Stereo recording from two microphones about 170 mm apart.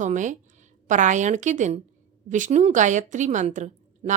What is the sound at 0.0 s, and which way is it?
A woman's voice, 45° right (ahead or behind).